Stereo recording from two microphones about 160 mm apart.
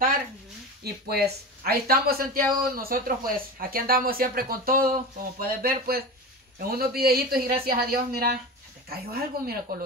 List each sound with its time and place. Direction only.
1.0 s speech: 80° right